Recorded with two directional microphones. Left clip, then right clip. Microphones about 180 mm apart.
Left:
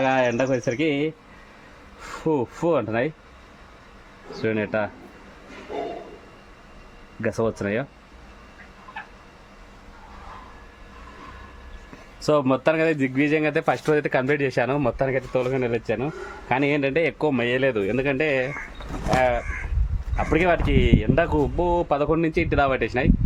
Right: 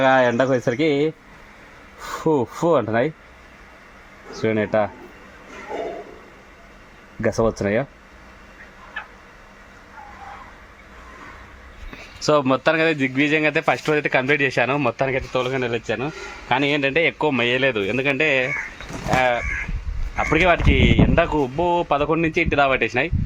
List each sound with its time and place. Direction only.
0.0 s speech: 30° right (ahead or behind)
4.3 s speech: 30° right (ahead or behind)
7.2 s speech: 30° right (ahead or behind)
12.2 s speech: 10° right (ahead or behind)